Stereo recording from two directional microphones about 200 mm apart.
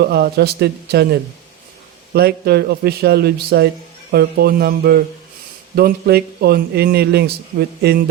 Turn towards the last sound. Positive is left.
turn(degrees=-55)  # may be behind; listen again after turning